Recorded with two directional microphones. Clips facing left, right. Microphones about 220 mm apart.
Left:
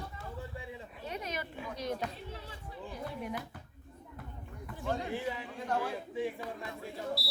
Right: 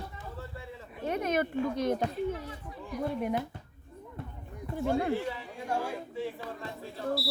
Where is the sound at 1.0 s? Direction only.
55° right (ahead or behind).